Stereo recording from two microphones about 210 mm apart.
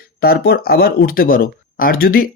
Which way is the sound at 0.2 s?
45° left (ahead or behind).